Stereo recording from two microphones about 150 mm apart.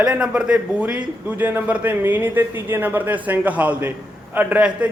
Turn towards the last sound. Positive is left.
turn(degrees=-10)  # may be behind; listen again after turning